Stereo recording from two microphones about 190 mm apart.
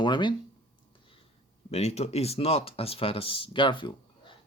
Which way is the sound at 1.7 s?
35° left (ahead or behind).